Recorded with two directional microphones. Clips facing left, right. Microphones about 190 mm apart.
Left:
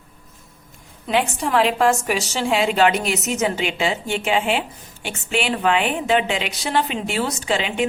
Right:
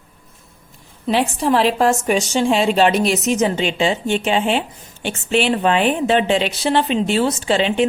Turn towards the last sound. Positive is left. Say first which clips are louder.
# right 5 dB
turn(degrees=-30)  # may be behind; listen again after turning